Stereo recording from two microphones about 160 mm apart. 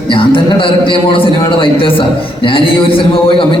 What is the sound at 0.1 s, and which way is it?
A man's voice, 35° left (ahead or behind).